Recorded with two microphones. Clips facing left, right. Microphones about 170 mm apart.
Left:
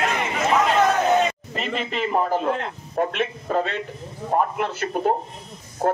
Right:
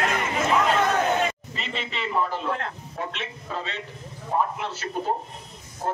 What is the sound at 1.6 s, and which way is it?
A man's voice, 50° left (ahead or behind).